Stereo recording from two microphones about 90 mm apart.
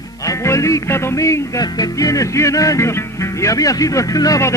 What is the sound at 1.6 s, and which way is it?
Music, 45° left (ahead or behind).